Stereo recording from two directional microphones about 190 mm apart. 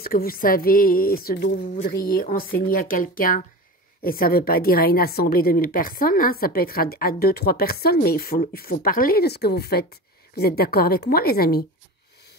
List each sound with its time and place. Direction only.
0.0 s a woman's voice: 50° left (ahead or behind)